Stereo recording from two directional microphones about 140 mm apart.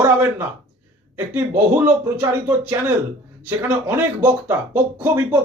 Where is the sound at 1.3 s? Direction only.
15° right (ahead or behind).